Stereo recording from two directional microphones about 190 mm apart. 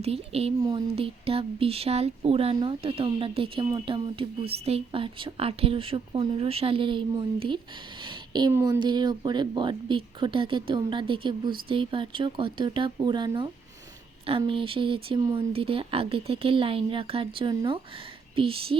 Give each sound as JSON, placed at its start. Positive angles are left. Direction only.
{"t": 0.0, "sound": "speech", "side_deg": -30}
{"t": 8.0, "sound": "a sound", "side_deg": -25}
{"t": 8.5, "sound": "speech", "side_deg": -15}